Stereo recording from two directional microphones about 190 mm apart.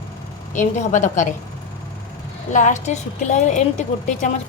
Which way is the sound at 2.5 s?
40° left (ahead or behind).